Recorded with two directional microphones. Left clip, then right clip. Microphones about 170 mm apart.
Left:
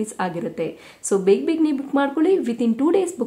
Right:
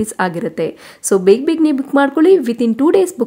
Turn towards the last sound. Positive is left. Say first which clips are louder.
# right 7 dB
turn(degrees=-40)  # may be behind; listen again after turning